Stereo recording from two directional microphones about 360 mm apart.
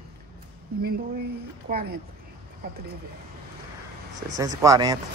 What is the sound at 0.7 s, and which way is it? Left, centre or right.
Speech, right.